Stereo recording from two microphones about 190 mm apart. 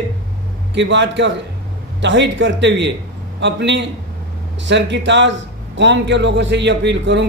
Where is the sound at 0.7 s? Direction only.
70° right (ahead or behind).